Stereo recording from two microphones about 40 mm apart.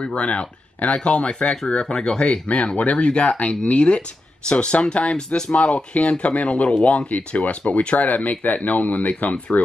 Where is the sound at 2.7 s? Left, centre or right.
Left; by 5.5 s centre.